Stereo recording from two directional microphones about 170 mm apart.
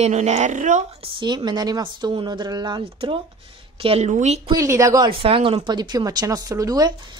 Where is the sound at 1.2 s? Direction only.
25° right (ahead or behind).